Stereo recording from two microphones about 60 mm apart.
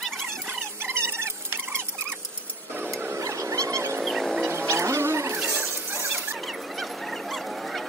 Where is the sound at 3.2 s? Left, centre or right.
Right.